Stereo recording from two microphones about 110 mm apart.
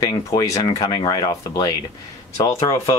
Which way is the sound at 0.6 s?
45° left (ahead or behind).